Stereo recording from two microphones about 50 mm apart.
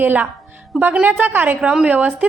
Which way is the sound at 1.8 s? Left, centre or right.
Right.